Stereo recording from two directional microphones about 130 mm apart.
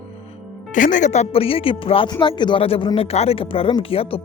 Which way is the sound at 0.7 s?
80° left.